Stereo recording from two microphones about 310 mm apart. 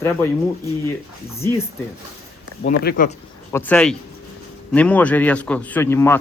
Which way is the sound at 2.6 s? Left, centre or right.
Left.